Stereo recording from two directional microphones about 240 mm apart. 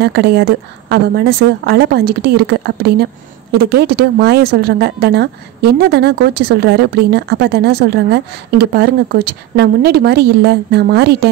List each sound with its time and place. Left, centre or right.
0.0 s a woman's voice: right